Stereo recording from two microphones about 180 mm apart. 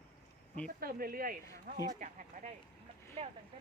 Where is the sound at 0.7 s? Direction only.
55° right (ahead or behind).